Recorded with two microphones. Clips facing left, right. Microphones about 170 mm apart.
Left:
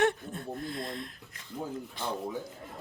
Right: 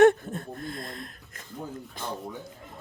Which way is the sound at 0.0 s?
50° right (ahead or behind).